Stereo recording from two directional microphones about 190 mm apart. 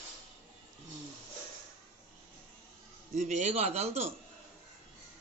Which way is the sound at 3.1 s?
35° right (ahead or behind).